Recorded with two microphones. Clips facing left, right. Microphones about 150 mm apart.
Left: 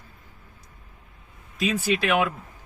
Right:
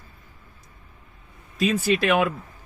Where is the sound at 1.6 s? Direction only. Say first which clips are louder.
Right 3 dB; 15° left (ahead or behind).